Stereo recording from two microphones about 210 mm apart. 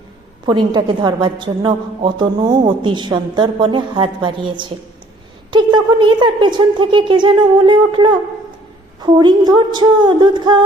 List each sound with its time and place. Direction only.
0.4 s a woman's voice: 20° right (ahead or behind)